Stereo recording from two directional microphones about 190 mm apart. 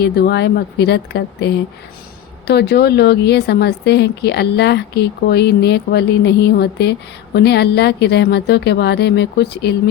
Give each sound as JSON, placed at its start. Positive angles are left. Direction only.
{"t": 0.0, "sound": "speech", "side_deg": 60}